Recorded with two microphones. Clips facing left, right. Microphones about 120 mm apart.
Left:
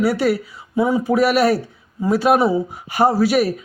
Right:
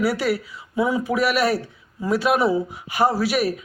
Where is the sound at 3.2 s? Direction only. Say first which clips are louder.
Left 5 dB; 40° left (ahead or behind).